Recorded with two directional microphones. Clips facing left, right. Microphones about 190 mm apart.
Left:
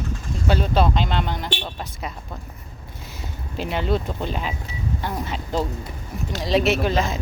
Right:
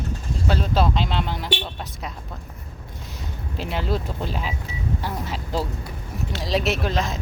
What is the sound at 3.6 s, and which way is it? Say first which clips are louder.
Speech: left 3 dB; centre (ahead or behind).